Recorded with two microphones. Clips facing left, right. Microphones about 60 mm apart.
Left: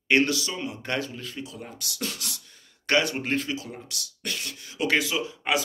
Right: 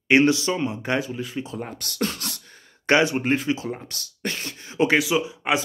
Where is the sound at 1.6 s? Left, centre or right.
Right.